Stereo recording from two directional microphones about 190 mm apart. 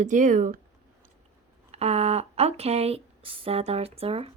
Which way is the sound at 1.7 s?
35° right (ahead or behind).